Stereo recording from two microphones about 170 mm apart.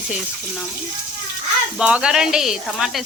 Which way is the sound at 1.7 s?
5° right (ahead or behind).